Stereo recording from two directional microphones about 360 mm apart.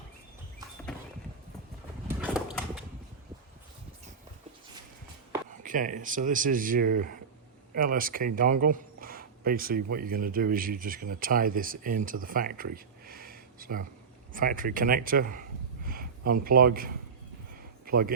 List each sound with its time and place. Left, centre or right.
2.0 s horse: centre
5.6 s speech: right